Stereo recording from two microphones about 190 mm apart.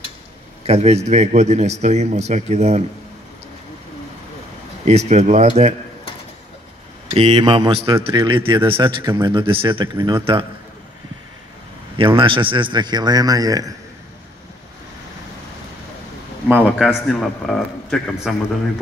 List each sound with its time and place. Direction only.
0.7 s a man's voice: 35° right (ahead or behind)
4.8 s a man's voice: 35° right (ahead or behind)
7.2 s a man's voice: 25° right (ahead or behind)
12.0 s a man's voice: 25° right (ahead or behind)
16.4 s a man's voice: 5° right (ahead or behind)